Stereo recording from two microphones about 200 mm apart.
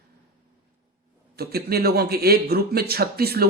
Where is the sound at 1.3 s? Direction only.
50° right (ahead or behind).